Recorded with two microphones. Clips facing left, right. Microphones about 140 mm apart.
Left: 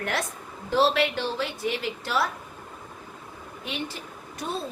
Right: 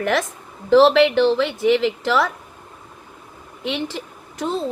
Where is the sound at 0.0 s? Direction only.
90° right.